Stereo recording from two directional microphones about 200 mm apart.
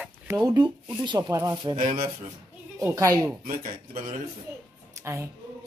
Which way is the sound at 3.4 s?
45° right (ahead or behind).